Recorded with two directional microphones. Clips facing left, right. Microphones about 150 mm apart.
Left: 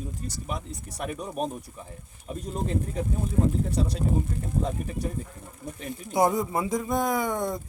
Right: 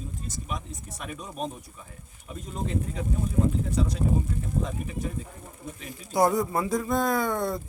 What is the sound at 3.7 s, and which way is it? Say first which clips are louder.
Speech: even; 30° left (ahead or behind).